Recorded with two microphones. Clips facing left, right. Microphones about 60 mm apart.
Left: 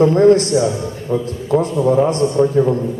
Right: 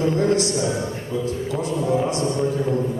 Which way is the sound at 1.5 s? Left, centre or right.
Left.